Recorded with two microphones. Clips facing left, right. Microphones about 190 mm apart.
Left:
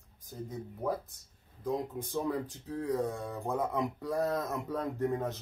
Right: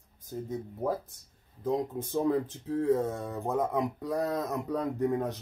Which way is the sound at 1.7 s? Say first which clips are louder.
Right 4 dB; 25° right (ahead or behind).